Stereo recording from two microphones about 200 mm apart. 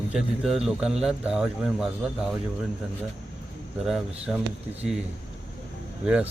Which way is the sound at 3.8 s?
5° right (ahead or behind).